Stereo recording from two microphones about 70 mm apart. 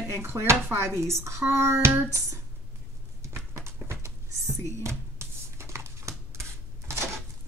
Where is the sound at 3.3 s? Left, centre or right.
Right.